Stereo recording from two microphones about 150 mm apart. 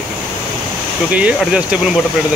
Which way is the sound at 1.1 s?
10° right (ahead or behind).